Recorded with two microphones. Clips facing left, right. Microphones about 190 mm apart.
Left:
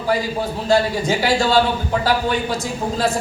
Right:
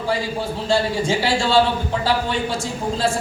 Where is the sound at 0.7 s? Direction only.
30° right (ahead or behind).